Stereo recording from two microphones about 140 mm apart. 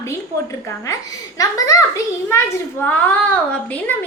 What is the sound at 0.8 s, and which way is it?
A woman's voice, 25° left (ahead or behind).